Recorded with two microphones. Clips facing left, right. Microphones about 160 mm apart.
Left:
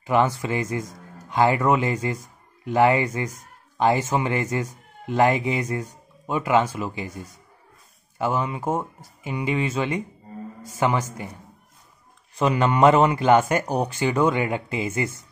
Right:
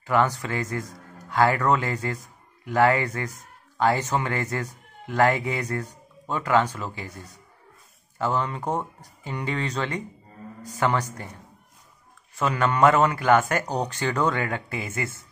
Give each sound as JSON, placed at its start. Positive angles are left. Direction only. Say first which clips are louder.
{"t": 0.0, "sound": "speech", "louder": "left 2 dB", "side_deg": 15}
{"t": 12.4, "sound": "speech", "louder": "left 3 dB", "side_deg": 20}